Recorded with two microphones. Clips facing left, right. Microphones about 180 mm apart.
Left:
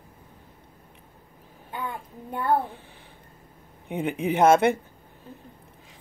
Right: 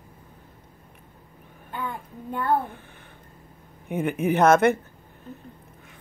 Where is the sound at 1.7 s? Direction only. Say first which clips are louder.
Right 1 dB; 15° left (ahead or behind).